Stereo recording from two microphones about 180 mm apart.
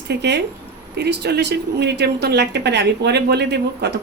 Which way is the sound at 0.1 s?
70° right (ahead or behind).